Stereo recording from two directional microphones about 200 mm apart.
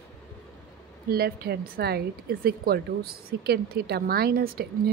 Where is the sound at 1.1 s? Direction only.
50° right (ahead or behind).